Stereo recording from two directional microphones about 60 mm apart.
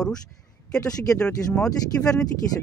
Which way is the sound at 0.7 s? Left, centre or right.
Centre.